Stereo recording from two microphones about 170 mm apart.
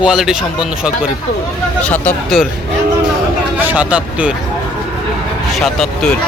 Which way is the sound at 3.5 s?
10° right (ahead or behind).